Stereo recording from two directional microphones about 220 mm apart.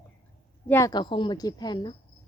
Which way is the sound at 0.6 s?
10° left (ahead or behind).